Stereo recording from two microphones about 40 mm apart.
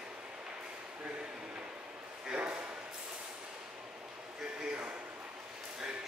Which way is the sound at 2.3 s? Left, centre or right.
Right.